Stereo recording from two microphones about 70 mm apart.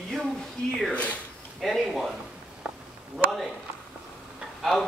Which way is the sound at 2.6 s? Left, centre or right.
Centre.